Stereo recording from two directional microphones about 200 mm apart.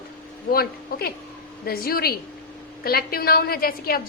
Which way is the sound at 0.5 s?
50° left (ahead or behind).